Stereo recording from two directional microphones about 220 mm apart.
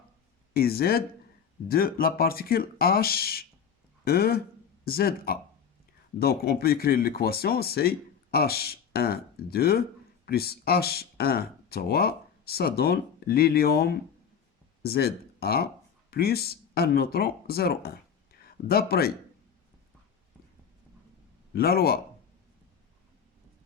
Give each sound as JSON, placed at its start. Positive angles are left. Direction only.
{"t": 0.5, "sound": "speech", "side_deg": 45}
{"t": 21.5, "sound": "speech", "side_deg": 45}